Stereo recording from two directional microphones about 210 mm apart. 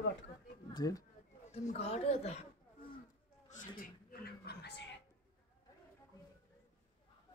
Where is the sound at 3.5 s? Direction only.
45° left (ahead or behind).